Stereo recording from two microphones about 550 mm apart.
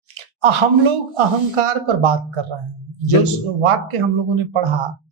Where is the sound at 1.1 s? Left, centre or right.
Right.